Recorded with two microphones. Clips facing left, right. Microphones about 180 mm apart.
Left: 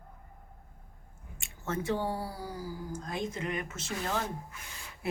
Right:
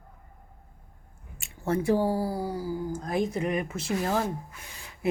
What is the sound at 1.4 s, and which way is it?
Speech, 35° right (ahead or behind).